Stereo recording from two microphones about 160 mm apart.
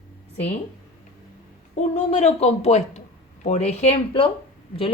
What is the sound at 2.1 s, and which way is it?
A woman's voice, 45° left (ahead or behind).